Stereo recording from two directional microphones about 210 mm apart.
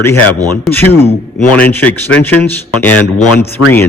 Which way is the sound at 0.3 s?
15° right (ahead or behind).